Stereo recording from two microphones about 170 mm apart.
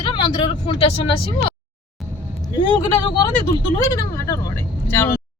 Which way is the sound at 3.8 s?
20° left (ahead or behind).